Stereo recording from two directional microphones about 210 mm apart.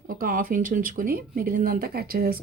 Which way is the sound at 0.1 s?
40° right (ahead or behind).